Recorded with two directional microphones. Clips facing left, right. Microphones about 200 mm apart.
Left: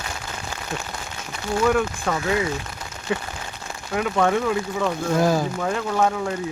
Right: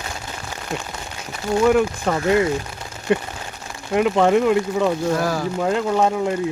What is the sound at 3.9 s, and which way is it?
Speech, 15° right (ahead or behind).